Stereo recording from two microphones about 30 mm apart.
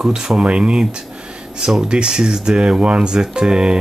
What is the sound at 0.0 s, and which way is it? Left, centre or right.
Speech, right.